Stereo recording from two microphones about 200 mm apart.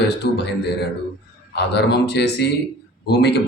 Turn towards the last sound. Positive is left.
turn(degrees=55)  # may be behind; listen again after turning